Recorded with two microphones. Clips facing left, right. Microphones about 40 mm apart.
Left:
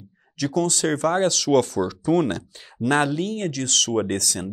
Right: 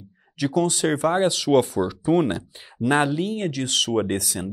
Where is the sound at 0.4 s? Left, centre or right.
Right.